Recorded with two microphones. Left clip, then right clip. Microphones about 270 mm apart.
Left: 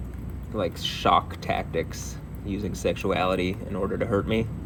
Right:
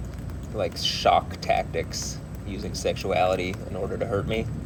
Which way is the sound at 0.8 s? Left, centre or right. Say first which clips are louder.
Right 1 dB; left.